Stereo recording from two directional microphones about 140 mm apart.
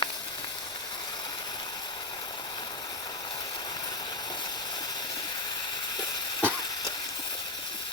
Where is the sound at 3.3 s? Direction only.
30° left (ahead or behind).